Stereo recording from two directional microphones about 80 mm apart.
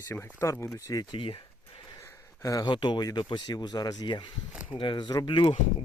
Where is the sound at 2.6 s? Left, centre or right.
Left.